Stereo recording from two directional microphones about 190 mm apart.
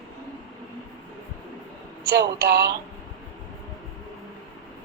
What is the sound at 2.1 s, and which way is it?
Speech, 55° right (ahead or behind).